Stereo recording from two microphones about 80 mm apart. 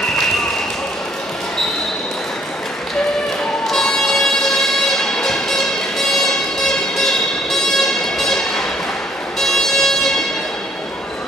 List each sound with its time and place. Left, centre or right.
3.6 s music: centre